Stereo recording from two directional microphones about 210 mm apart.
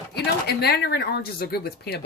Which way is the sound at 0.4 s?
50° left (ahead or behind).